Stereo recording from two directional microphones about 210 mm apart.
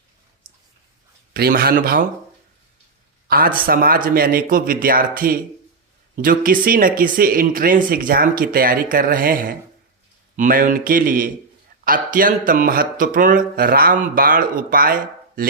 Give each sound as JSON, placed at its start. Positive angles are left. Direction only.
{"t": 1.3, "sound": "speech", "side_deg": -45}
{"t": 3.2, "sound": "speech", "side_deg": -45}